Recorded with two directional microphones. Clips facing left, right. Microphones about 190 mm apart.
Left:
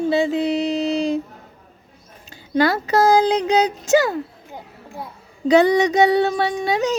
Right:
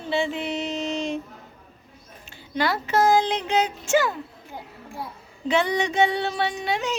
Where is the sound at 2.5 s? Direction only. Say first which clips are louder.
Left 6 dB; 40° left (ahead or behind).